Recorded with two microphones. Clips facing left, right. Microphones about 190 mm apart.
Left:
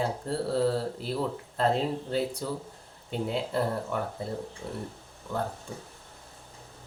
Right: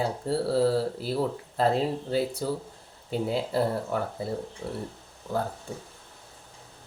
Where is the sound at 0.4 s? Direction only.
30° right (ahead or behind).